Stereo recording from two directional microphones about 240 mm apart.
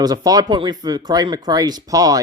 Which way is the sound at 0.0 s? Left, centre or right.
Centre.